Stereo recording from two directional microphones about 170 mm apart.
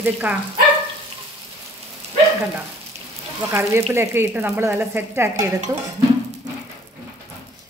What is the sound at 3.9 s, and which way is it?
Speech, 15° right (ahead or behind).